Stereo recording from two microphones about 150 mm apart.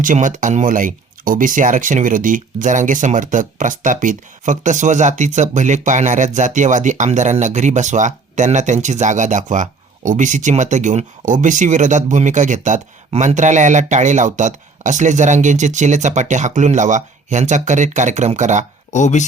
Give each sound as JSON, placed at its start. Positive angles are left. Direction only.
{"t": 0.0, "sound": "speech", "side_deg": -60}
{"t": 18.9, "sound": "speech", "side_deg": 55}